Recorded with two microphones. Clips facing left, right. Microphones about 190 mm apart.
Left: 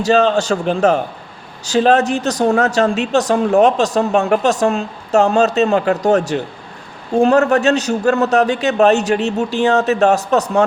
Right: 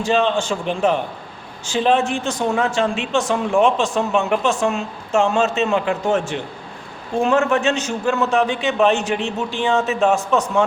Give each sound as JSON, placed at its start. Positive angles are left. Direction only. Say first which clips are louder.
{"t": 0.0, "sound": "speech", "louder": "left 5 dB", "side_deg": 40}